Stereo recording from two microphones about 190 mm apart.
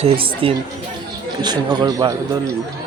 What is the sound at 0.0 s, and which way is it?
A man's voice, 30° right (ahead or behind).